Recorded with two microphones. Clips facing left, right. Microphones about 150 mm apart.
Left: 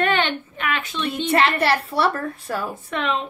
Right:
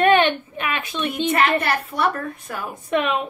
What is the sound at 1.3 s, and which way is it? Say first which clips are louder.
A woman's voice: left 3 dB; 30° left (ahead or behind).